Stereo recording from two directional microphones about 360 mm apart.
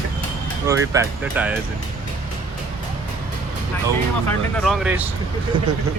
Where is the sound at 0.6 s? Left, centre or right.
Centre.